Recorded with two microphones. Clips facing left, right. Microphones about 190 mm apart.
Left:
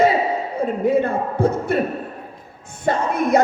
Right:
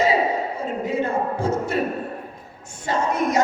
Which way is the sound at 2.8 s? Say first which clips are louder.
Left 2 dB; 55° left (ahead or behind).